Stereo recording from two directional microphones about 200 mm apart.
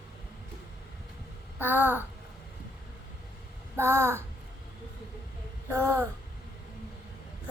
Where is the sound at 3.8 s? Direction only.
10° right (ahead or behind).